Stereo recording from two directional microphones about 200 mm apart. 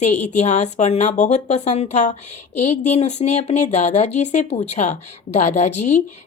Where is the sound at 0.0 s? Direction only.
35° left (ahead or behind).